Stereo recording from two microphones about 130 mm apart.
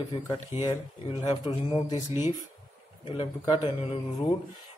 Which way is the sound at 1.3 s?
40° left (ahead or behind).